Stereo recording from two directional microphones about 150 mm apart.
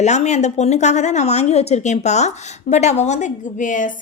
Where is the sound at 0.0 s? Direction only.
50° left (ahead or behind).